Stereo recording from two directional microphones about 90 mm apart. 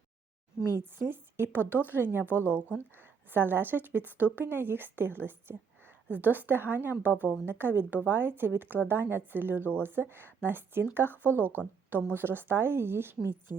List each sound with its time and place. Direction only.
0.6 s speech: 40° left (ahead or behind)
1.1 s speech: 20° right (ahead or behind)
1.8 s speech: 20° left (ahead or behind)
2.4 s speech: 20° right (ahead or behind)
2.6 s speech: 20° left (ahead or behind)
3.2 s speech: 25° right (ahead or behind)
11.1 s speech: 20° left (ahead or behind)
12.0 s speech: 25° right (ahead or behind)